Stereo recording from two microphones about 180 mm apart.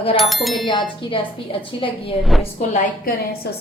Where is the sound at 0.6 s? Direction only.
25° left (ahead or behind).